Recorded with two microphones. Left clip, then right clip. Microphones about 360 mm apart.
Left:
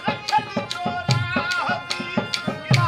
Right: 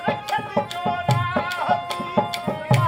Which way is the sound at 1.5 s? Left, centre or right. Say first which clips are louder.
Right 1 dB; right.